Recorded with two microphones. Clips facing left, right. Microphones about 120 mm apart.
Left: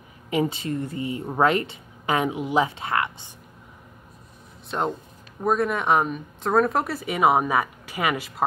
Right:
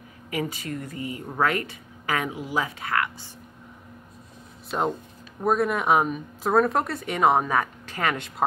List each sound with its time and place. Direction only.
0.3 s speech: 25° left (ahead or behind)
4.6 s speech: centre (ahead or behind)